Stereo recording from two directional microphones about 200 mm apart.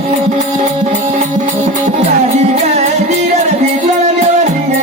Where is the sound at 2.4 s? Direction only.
35° right (ahead or behind).